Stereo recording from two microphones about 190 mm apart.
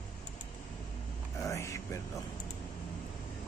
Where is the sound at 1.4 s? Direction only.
15° left (ahead or behind).